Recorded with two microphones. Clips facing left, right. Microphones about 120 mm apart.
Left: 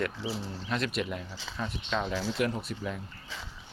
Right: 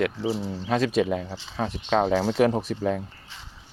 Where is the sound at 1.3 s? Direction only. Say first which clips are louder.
Right 7 dB; 85° right.